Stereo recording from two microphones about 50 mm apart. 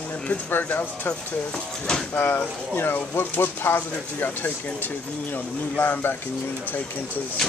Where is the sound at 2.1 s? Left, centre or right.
Left.